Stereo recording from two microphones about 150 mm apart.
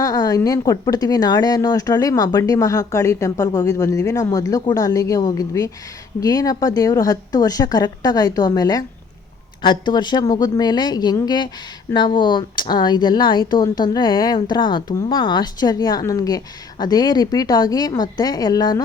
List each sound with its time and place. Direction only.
0.0 s speech: 25° left (ahead or behind)